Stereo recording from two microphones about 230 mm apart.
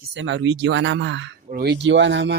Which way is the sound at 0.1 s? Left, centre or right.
Right.